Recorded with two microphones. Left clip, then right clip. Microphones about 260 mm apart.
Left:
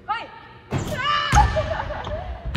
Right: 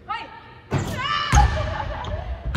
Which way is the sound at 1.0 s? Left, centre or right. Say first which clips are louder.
Left 2 dB; right.